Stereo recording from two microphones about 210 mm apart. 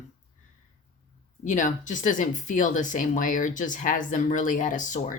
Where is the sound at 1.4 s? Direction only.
35° left (ahead or behind).